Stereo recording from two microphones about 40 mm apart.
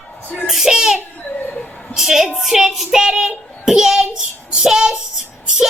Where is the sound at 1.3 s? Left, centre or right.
Left.